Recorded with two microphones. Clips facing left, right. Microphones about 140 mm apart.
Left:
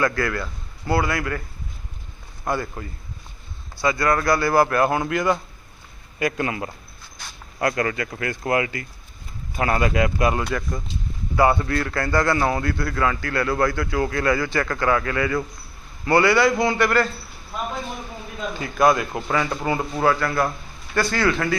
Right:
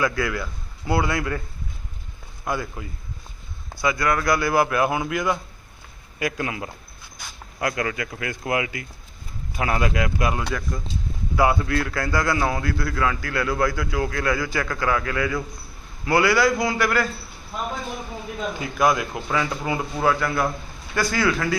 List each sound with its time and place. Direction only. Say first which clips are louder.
0.0 s a man's voice: left 1 dB; 10° right (ahead or behind)
2.5 s a man's voice: left 2 dB; 10° right (ahead or behind)
18.5 s a man's voice: left 3 dB; 10° right (ahead or behind)